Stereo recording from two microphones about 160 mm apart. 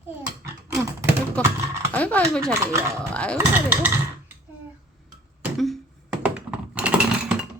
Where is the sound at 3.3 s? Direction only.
10° right (ahead or behind).